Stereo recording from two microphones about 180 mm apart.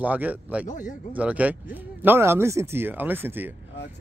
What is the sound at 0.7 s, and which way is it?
Speech, 45° left (ahead or behind).